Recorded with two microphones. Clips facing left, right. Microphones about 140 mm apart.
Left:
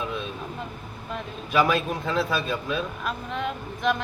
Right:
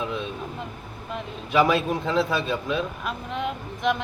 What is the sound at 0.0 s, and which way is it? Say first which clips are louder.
Vehicle: right 2 dB; 20° right (ahead or behind).